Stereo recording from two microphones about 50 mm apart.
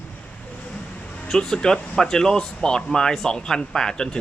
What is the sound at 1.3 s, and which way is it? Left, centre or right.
Speech, centre.